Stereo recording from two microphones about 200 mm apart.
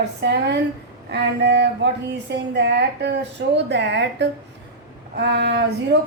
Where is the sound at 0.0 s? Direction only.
60° right (ahead or behind).